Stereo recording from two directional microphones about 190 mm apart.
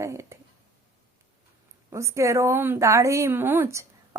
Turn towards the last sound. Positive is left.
turn(degrees=-15)  # may be behind; listen again after turning